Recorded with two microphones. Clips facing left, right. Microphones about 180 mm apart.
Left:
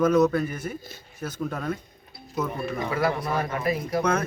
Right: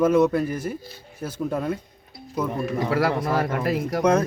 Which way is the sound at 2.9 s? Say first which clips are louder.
Right 3 dB; 80° right.